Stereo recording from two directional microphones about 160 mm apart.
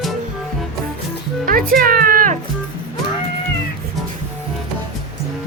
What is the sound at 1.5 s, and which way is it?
Speech, 60° right (ahead or behind).